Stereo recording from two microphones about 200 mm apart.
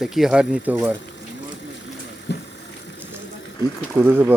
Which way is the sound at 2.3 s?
60° left (ahead or behind).